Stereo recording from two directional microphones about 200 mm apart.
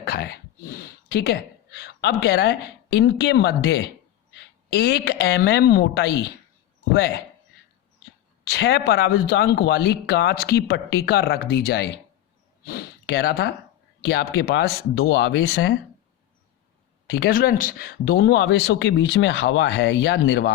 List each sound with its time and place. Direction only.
0.0 s speech: 60° left (ahead or behind)
8.4 s speech: 55° left (ahead or behind)
17.1 s speech: 55° left (ahead or behind)